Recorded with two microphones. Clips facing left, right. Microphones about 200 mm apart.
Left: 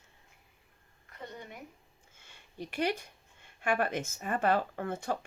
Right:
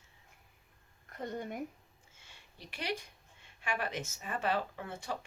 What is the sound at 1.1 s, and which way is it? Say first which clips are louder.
Speech: right 6 dB; 45° right (ahead or behind).